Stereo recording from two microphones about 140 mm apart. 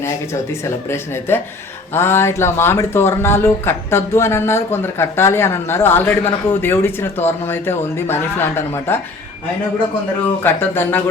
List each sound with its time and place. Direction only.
0.6 s speech: 20° left (ahead or behind)
10.4 s speech: 15° left (ahead or behind)